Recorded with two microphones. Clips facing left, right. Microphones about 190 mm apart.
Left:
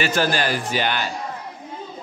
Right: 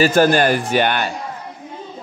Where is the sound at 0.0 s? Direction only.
50° right (ahead or behind).